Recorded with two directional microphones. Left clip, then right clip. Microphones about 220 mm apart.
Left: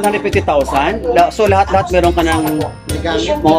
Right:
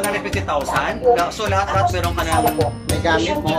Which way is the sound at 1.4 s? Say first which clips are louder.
Left 7 dB; 40° left (ahead or behind).